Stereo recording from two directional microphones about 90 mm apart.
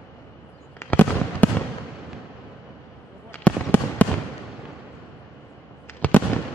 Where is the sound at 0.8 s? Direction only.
20° left (ahead or behind).